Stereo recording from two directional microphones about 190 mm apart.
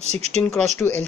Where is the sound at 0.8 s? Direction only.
10° left (ahead or behind).